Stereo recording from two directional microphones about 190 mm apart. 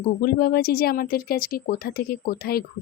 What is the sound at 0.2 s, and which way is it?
Speech, 55° left (ahead or behind).